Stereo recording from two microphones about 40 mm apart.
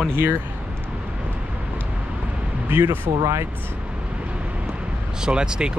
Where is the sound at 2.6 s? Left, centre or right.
Right.